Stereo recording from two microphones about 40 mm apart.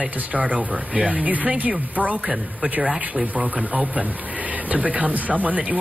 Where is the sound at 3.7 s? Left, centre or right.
Right.